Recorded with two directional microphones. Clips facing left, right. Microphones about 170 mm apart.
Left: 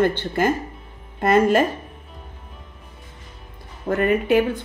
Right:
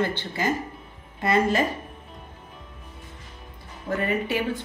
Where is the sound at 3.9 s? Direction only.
55° left (ahead or behind).